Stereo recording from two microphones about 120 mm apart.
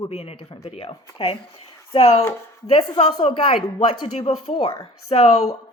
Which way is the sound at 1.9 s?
65° left (ahead or behind).